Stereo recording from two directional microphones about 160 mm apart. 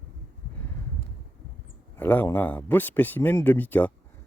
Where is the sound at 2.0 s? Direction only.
10° left (ahead or behind).